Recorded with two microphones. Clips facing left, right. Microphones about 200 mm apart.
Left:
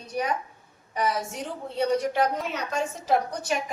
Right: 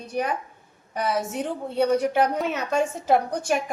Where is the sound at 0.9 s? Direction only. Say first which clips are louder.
Right 2 dB; 55° right (ahead or behind).